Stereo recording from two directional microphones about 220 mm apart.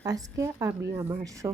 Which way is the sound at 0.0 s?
15° right (ahead or behind).